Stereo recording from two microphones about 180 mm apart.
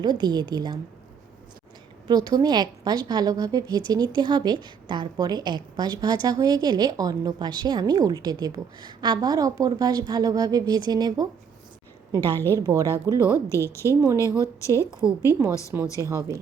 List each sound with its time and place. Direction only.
0.0 s a woman's voice: 25° right (ahead or behind)
2.0 s a woman's voice: 20° right (ahead or behind)
12.2 s a woman's voice: 10° left (ahead or behind)
12.5 s a woman's voice: 15° right (ahead or behind)
13.5 s a woman's voice: 15° left (ahead or behind)
15.0 s a woman's voice: 5° right (ahead or behind)
16.0 s a woman's voice: 15° right (ahead or behind)